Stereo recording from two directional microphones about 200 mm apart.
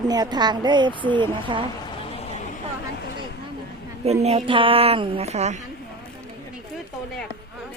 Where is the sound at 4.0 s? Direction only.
30° right (ahead or behind).